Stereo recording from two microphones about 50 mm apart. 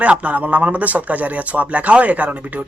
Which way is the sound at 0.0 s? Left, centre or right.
Right.